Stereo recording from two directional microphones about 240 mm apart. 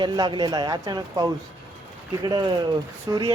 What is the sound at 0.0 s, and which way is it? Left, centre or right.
Speech, centre.